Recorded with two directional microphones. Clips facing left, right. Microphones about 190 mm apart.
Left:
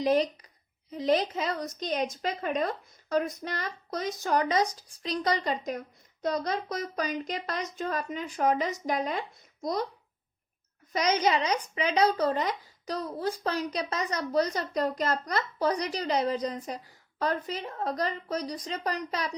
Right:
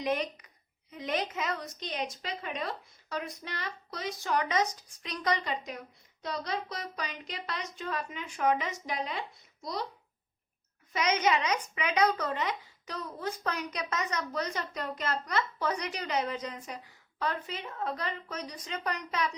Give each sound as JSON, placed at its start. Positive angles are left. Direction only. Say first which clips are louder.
{"t": 0.0, "sound": "a child's voice", "louder": "left 6 dB", "side_deg": 35}
{"t": 10.9, "sound": "speech", "louder": "left 2 dB", "side_deg": 35}